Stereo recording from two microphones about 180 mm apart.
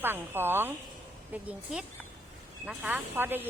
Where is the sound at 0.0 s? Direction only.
10° right (ahead or behind).